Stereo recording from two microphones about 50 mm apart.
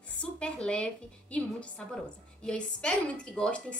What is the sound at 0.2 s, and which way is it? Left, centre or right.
Speech, left.